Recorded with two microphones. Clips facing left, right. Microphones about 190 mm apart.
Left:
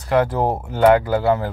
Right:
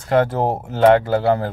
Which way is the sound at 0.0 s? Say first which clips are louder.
Right 1 dB; 25° right (ahead or behind).